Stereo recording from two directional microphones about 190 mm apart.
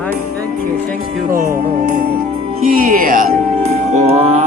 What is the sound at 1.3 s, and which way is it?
Music, 50° right (ahead or behind).